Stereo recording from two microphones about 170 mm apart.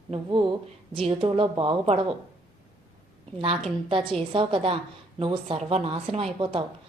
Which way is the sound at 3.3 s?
35° right (ahead or behind).